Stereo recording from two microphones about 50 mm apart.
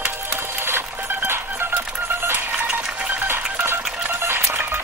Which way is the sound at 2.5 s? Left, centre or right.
Right.